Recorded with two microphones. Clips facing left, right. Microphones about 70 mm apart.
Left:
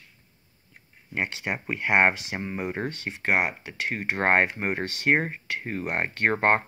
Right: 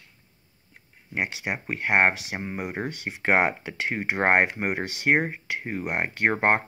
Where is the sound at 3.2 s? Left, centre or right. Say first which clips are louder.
Right 3 dB; right.